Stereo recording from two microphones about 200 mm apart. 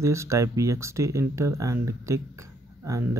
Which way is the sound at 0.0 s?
15° right (ahead or behind).